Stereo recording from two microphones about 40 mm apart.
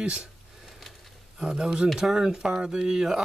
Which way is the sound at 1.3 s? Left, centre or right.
Centre.